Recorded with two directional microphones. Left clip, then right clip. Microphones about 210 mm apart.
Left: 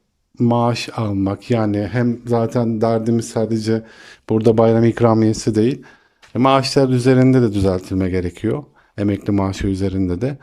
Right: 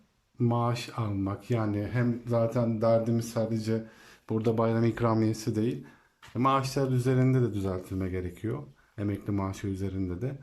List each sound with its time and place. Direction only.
0.3 s speech: 40° left (ahead or behind)